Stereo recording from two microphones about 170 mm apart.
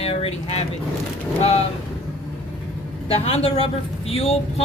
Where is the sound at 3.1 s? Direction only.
35° left (ahead or behind).